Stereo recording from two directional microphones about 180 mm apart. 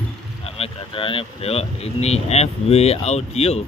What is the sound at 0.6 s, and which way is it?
Speech, 30° left (ahead or behind).